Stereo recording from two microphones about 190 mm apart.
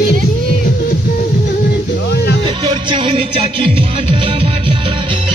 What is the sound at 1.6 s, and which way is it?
Music, 60° left (ahead or behind).